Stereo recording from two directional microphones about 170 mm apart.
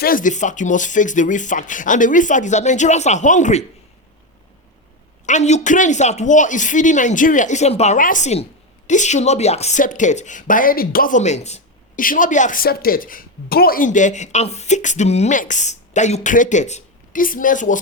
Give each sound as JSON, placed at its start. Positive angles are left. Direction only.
{"t": 0.0, "sound": "a woman's voice", "side_deg": 55}
{"t": 5.2, "sound": "a woman's voice", "side_deg": 45}